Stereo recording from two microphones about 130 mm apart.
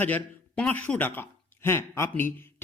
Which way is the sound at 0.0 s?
10° left (ahead or behind).